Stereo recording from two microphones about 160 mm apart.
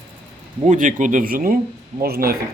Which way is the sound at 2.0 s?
70° right (ahead or behind).